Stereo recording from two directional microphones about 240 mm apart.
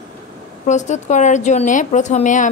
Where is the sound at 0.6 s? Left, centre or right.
Left.